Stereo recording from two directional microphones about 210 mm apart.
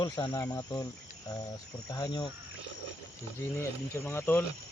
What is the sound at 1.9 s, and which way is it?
Cricket, 20° left (ahead or behind).